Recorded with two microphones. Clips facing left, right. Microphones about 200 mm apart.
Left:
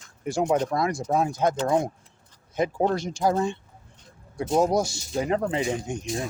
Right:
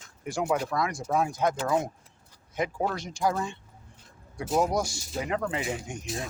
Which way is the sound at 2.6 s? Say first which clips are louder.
Left 6 dB; 25° left (ahead or behind).